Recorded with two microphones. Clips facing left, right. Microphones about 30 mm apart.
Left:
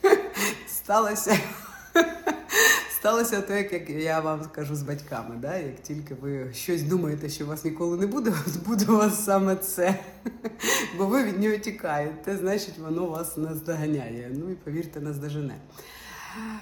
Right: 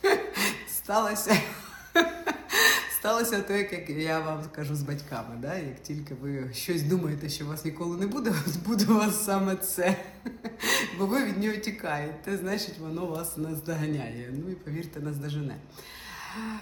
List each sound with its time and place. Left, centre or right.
0.0 s chuckle: right
3.8 s a man's voice: right
6.3 s a man's voice: right
16.3 s a sound: centre